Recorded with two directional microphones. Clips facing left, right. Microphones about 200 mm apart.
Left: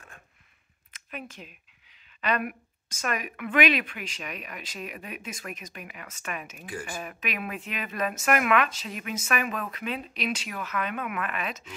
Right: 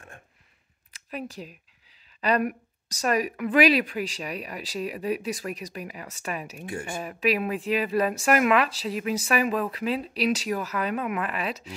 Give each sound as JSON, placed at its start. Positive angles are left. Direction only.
{"t": 0.9, "sound": "speech", "side_deg": -35}